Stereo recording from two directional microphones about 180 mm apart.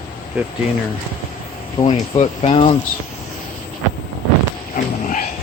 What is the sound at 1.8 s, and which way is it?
Speech, 35° left (ahead or behind).